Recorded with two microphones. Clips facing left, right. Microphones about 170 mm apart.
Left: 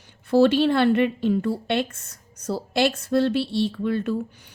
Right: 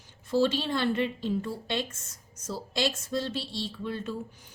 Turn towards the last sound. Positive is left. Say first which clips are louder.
# left 9 dB
turn(degrees=65)  # may be behind; listen again after turning